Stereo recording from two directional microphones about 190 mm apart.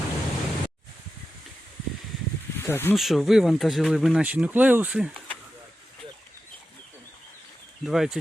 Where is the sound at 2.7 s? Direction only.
10° left (ahead or behind).